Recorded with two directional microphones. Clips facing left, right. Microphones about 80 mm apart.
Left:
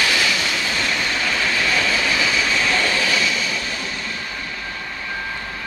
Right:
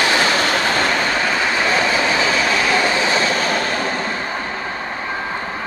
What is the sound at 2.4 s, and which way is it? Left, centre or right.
Train, right.